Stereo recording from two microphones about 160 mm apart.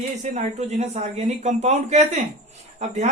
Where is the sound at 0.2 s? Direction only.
45° right (ahead or behind).